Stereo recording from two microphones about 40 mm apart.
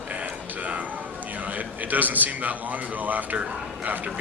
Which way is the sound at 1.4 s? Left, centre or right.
Right.